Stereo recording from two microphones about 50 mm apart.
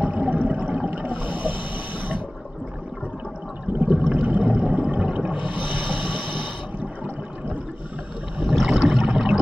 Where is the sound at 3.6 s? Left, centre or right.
Right.